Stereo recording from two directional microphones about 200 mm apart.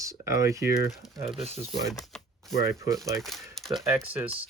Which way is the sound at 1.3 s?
30° right (ahead or behind).